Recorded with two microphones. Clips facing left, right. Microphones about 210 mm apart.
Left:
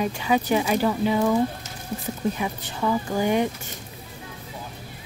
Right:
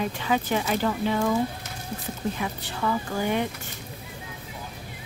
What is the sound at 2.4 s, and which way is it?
Speech, 15° left (ahead or behind).